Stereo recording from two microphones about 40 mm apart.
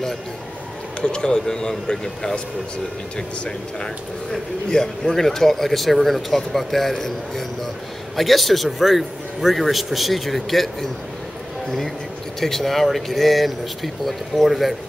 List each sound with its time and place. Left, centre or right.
1.0 s a man's voice: left; by 10.9 s centre
12.4 s a man's voice: centre